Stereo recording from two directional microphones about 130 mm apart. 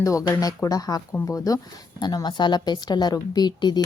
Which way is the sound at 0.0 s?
25° left (ahead or behind).